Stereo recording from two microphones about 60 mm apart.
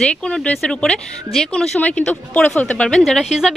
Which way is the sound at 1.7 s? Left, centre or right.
Left.